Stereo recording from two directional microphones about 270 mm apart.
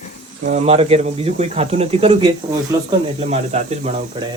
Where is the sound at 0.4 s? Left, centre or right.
Right.